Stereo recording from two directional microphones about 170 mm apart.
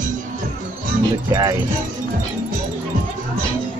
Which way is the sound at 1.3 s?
20° right (ahead or behind).